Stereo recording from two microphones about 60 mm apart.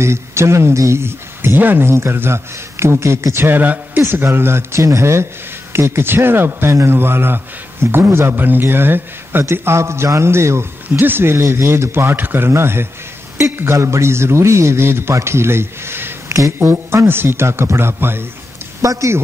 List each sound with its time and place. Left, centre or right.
0.0 s speech: right
1.6 s a man's voice: right
1.9 s a man's voice: right
4.1 s a man's voice: right
11.0 s a man's voice: right
16.3 s a sound: right
16.5 s a man's voice: right
18.8 s speech: right